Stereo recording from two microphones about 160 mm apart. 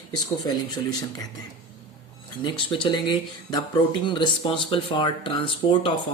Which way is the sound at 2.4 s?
30° left (ahead or behind).